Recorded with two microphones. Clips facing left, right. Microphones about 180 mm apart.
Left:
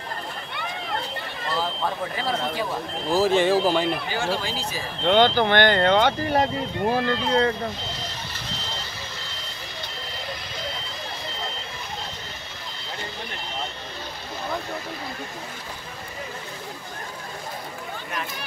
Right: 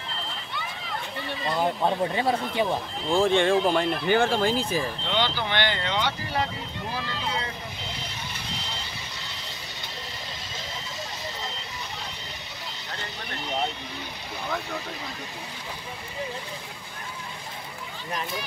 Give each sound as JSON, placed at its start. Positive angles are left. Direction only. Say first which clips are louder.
{"t": 0.5, "sound": "a sound", "louder": "left 6 dB", "side_deg": 60}
{"t": 1.5, "sound": "speech", "louder": "right 2 dB", "side_deg": -20}
{"t": 3.1, "sound": "speech", "louder": "left 1 dB", "side_deg": 5}
{"t": 4.1, "sound": "speech", "louder": "right 5 dB", "side_deg": -55}
{"t": 5.0, "sound": "speech", "louder": "left 9 dB", "side_deg": 50}